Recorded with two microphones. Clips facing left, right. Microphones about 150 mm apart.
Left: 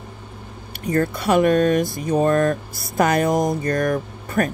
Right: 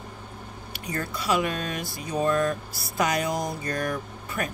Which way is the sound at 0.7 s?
55° left (ahead or behind).